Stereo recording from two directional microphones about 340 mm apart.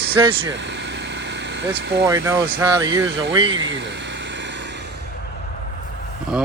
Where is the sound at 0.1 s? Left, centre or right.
Centre.